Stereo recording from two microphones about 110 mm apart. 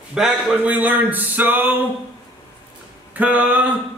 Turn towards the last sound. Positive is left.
turn(degrees=-15)  # may be behind; listen again after turning